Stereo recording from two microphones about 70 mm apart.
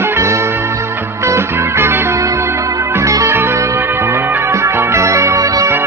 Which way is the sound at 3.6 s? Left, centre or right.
Right.